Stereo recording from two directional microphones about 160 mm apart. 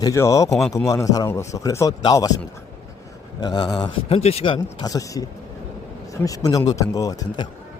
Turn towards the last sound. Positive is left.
turn(degrees=20)  # may be behind; listen again after turning